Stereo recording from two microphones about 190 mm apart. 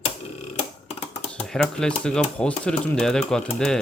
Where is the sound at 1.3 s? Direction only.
5° left (ahead or behind).